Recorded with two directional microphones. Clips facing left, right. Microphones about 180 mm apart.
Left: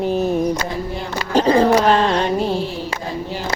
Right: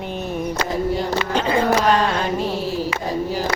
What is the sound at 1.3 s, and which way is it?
Speech, 35° left (ahead or behind).